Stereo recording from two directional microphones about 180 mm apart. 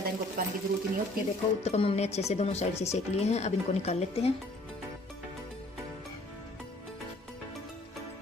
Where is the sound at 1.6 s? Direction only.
35° left (ahead or behind).